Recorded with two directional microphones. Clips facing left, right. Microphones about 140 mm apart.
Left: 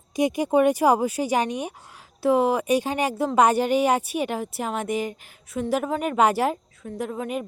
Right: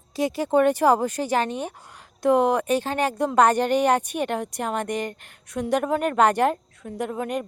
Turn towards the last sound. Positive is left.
turn(degrees=0)  # may be behind; listen again after turning